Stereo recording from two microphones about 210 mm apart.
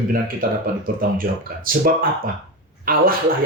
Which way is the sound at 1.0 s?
45° right (ahead or behind).